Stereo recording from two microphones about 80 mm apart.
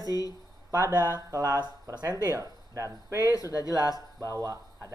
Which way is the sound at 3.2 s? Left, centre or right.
Left.